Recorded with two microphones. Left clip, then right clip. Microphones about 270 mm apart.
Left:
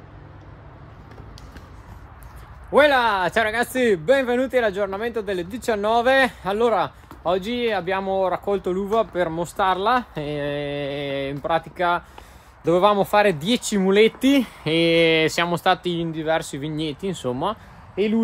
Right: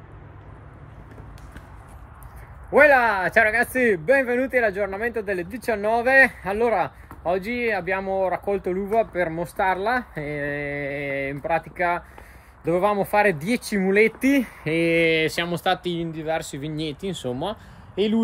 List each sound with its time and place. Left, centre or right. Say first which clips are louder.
2.7 s speech: right 1 dB; centre